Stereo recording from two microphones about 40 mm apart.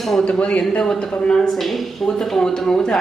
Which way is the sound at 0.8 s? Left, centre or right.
Centre.